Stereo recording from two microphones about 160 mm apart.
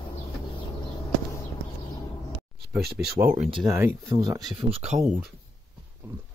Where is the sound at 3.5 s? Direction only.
20° right (ahead or behind).